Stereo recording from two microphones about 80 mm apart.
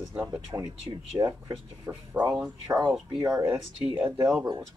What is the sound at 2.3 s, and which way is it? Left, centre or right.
Speech, right.